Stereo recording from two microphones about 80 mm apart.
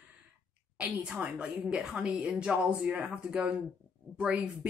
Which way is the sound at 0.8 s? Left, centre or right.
Centre.